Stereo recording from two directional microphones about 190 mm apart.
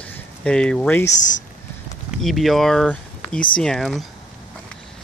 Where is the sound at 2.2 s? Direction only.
Centre (ahead or behind).